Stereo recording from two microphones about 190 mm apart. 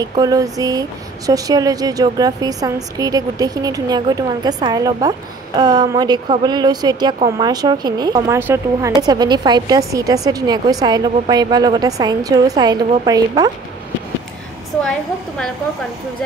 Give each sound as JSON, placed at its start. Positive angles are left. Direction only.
{"t": 0.0, "sound": "speech", "side_deg": -20}
{"t": 8.4, "sound": "speech", "side_deg": -10}
{"t": 14.9, "sound": "a woman's voice", "side_deg": 5}